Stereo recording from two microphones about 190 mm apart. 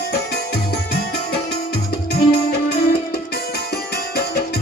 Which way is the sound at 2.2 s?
55° left (ahead or behind).